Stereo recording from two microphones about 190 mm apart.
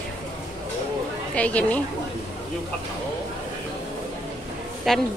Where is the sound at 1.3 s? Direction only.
5° left (ahead or behind).